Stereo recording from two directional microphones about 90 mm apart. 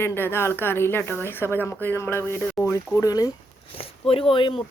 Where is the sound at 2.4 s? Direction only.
15° left (ahead or behind).